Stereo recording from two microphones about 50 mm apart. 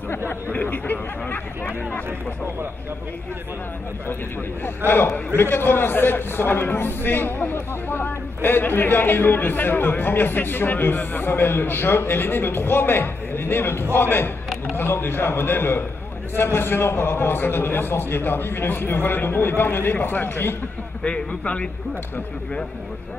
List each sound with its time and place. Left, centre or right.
0.3 s speech: left
4.6 s a man's voice: left
21.0 s a man's voice: left